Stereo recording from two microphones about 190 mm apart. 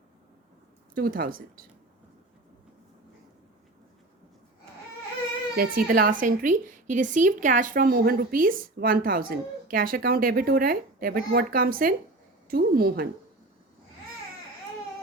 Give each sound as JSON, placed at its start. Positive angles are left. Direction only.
{"t": 0.9, "sound": "speech", "side_deg": -50}
{"t": 5.5, "sound": "speech", "side_deg": -50}